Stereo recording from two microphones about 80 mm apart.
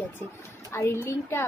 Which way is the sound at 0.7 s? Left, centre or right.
Left.